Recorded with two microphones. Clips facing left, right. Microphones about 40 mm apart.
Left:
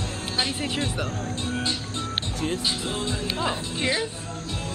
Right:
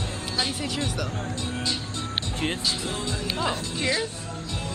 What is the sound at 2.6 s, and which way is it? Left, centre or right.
Speech, left.